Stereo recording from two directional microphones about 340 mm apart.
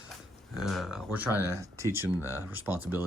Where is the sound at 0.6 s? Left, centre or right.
Centre.